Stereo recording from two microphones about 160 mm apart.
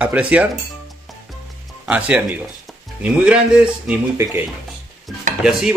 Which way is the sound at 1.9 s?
5° right (ahead or behind).